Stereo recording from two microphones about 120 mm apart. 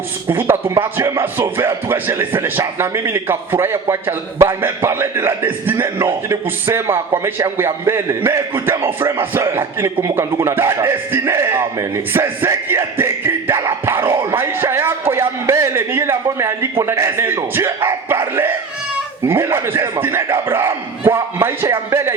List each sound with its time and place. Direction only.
0.3 s speech: 20° right (ahead or behind)
19.3 s speech: 20° right (ahead or behind)